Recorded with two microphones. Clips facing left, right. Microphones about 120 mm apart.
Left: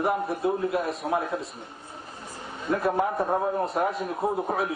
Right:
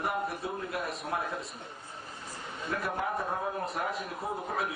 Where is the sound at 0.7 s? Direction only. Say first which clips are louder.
Left 8 dB; centre (ahead or behind).